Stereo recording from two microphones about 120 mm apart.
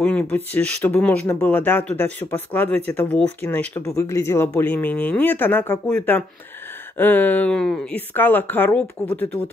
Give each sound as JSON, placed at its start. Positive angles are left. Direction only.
{"t": 0.0, "sound": "speech", "side_deg": 10}